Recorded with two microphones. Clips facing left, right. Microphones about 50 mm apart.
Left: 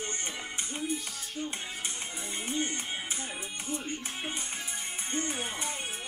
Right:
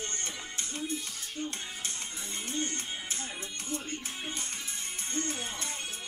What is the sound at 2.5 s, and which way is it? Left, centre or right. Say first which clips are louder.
Speech: left 2 dB; centre.